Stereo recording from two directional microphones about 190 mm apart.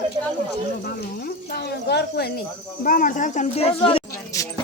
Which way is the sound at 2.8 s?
45° left (ahead or behind).